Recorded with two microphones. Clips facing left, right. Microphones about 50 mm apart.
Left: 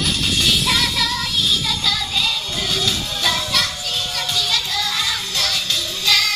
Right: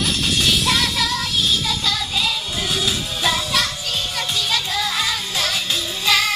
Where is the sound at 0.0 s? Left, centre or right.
Centre.